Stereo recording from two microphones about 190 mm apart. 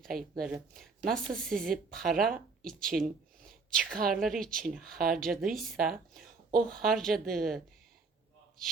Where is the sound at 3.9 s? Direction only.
50° right (ahead or behind).